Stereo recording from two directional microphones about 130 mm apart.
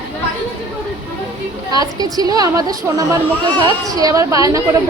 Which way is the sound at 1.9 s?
30° right (ahead or behind).